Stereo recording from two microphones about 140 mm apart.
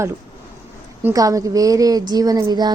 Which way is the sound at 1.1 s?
25° right (ahead or behind).